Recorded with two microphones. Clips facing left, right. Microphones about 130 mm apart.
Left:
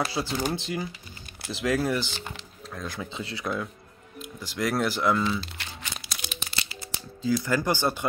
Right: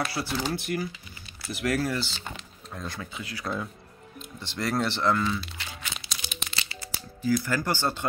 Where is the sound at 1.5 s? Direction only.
20° left (ahead or behind).